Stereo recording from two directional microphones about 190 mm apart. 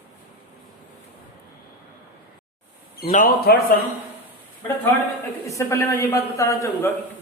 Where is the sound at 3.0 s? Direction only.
50° left (ahead or behind).